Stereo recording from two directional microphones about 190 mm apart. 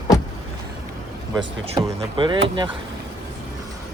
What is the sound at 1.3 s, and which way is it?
Speech, 30° right (ahead or behind).